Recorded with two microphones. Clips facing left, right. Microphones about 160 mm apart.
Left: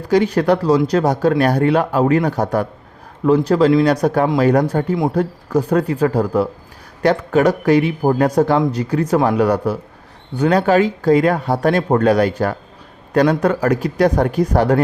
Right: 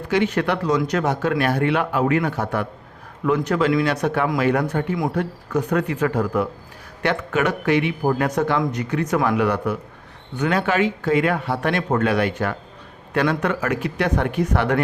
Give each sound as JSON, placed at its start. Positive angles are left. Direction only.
{"t": 0.1, "sound": "speech", "side_deg": 35}